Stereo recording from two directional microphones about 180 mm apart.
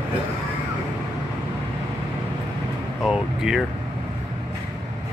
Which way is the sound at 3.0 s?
5° right (ahead or behind).